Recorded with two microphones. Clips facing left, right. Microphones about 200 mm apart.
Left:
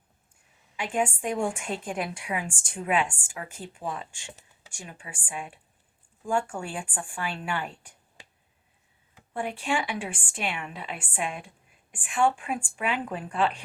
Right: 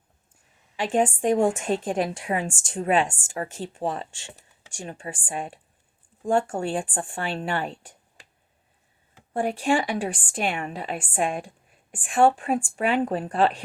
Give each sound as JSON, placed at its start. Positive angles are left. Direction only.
{"t": 0.9, "sound": "a woman's voice", "side_deg": -35}
{"t": 9.3, "sound": "a woman's voice", "side_deg": -40}